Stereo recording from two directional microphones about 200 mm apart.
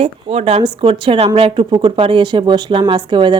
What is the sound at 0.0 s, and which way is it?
Speech, 30° right (ahead or behind).